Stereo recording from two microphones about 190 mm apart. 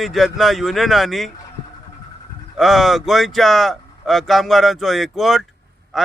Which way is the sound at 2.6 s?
Centre (ahead or behind).